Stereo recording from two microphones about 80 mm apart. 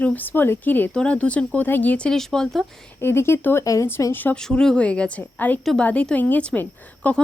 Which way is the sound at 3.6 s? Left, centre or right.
Left.